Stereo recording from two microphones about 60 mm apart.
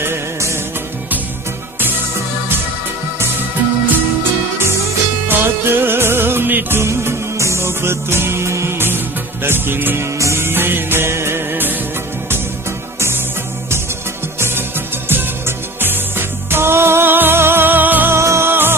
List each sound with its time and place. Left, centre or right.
0.0 s music of bollywood: right
5.3 s music: right
6.8 s music: right
8.7 s music: right
10.1 s music: right
10.4 s music: right
15.0 s music: right
18.1 s music: right
18.5 s music: right